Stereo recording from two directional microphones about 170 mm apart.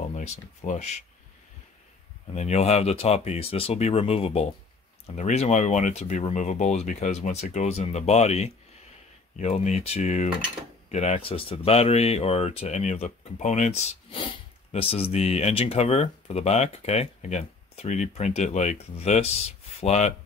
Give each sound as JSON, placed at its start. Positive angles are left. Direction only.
{"t": 0.1, "sound": "speech", "side_deg": 40}
{"t": 2.3, "sound": "speech", "side_deg": 40}